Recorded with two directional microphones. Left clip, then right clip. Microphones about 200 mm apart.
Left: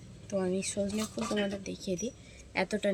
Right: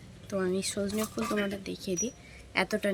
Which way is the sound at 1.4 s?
5° left (ahead or behind).